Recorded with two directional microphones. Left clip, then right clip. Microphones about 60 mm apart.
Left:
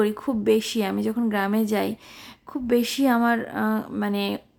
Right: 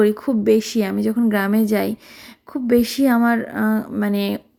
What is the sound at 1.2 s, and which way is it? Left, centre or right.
A woman's voice, right.